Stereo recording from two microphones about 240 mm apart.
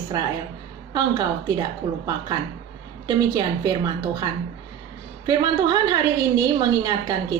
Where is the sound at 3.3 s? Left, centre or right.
Centre.